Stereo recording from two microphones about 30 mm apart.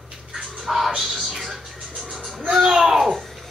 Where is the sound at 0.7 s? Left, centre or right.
Centre.